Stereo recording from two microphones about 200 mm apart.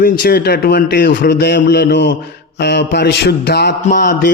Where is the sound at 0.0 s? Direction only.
45° left (ahead or behind).